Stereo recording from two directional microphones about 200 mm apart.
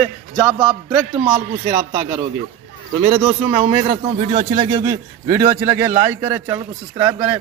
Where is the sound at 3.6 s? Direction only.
25° right (ahead or behind).